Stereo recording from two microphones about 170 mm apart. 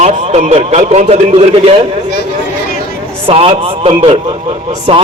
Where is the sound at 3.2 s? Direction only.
35° right (ahead or behind).